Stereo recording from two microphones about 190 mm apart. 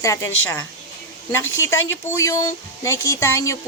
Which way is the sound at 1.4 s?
90° left.